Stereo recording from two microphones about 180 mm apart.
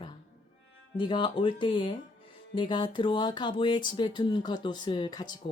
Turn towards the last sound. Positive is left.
turn(degrees=25)  # may be behind; listen again after turning